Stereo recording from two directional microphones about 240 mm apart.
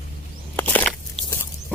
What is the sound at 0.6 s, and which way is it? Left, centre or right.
Biting, centre.